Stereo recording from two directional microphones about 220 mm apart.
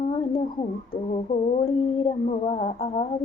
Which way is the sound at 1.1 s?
25° left (ahead or behind).